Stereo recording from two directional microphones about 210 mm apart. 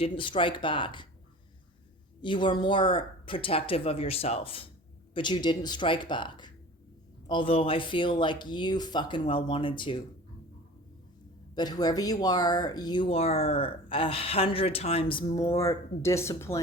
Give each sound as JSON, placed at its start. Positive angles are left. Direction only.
{"t": 0.0, "sound": "speech", "side_deg": 25}
{"t": 2.2, "sound": "speech", "side_deg": 20}
{"t": 11.5, "sound": "speech", "side_deg": 20}
{"t": 15.5, "sound": "speech", "side_deg": 15}